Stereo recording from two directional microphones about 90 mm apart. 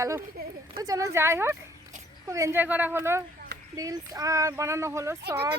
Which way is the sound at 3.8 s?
40° right (ahead or behind).